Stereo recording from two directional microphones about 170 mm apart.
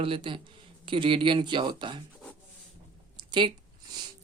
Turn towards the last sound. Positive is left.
turn(degrees=-25)  # may be behind; listen again after turning